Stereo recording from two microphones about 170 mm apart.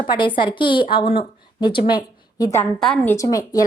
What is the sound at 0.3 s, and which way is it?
A woman's voice, 30° left (ahead or behind).